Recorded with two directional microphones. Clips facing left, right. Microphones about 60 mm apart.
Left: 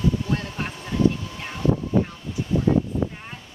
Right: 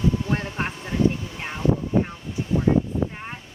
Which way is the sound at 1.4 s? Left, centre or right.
Right.